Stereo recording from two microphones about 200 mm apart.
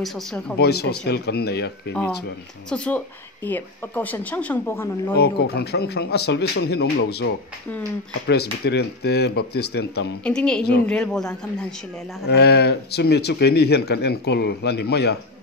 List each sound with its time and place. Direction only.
0.0 s speech: centre (ahead or behind)
0.6 s speech: 55° left (ahead or behind)
2.7 s speech: 5° left (ahead or behind)
5.2 s speech: 55° left (ahead or behind)
8.3 s speech: 55° left (ahead or behind)
10.2 s speech: 5° left (ahead or behind)
12.3 s speech: 55° left (ahead or behind)